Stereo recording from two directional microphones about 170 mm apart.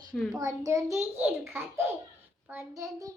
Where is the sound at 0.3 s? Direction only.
20° right (ahead or behind).